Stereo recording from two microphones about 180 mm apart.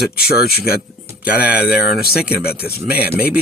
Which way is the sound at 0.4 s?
60° left (ahead or behind).